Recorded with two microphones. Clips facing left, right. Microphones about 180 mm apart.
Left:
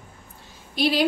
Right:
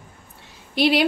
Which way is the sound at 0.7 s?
70° right (ahead or behind).